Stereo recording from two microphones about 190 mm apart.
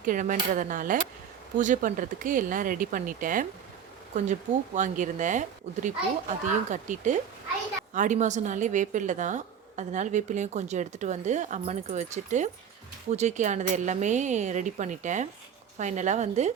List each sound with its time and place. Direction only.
0.0 s speech: 45° right (ahead or behind)